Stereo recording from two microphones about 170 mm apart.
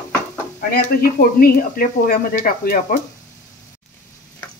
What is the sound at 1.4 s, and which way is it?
Speech, 60° left (ahead or behind).